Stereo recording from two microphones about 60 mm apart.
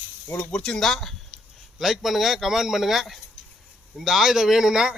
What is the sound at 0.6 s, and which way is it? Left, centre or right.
A man's voice, centre.